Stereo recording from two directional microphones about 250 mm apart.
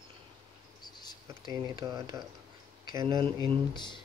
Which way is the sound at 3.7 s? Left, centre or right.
Centre.